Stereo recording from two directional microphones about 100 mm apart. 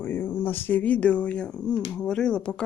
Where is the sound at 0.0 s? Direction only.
20° left (ahead or behind).